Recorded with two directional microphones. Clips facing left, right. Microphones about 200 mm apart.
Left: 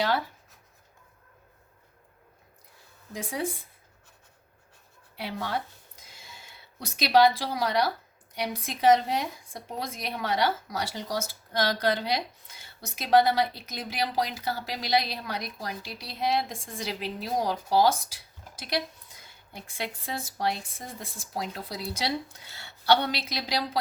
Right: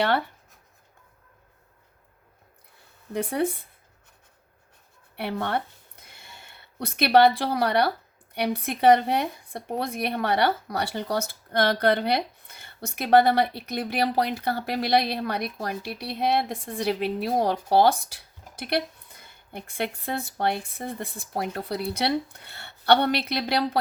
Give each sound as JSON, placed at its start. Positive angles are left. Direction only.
{"t": 3.1, "sound": "speech", "side_deg": -60}
{"t": 5.1, "sound": "speech", "side_deg": -60}